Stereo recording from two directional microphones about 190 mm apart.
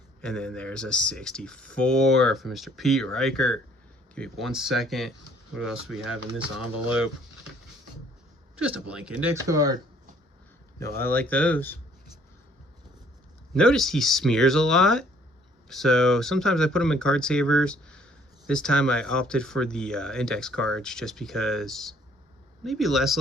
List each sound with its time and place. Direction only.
0.2 s speech: 5° left (ahead or behind)
8.5 s speech: 5° right (ahead or behind)
10.8 s speech: 10° left (ahead or behind)
13.5 s speech: centre (ahead or behind)